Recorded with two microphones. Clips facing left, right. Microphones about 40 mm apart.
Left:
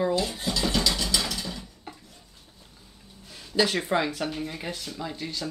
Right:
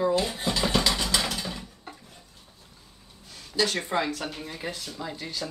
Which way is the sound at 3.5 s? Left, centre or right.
Centre.